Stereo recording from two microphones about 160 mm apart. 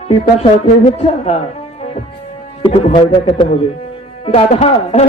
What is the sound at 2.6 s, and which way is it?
Speech, 35° left (ahead or behind).